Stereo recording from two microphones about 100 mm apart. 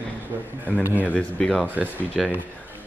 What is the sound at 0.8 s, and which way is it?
Speech, 15° left (ahead or behind).